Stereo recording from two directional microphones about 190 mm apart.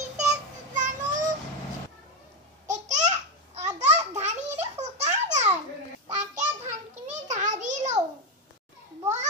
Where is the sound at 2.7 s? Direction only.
40° right (ahead or behind).